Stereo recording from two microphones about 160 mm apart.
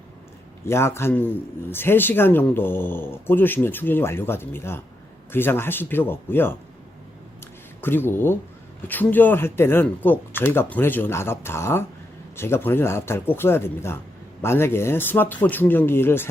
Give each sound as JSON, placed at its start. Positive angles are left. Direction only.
{"t": 0.6, "sound": "speech", "side_deg": 15}
{"t": 7.8, "sound": "speech", "side_deg": 15}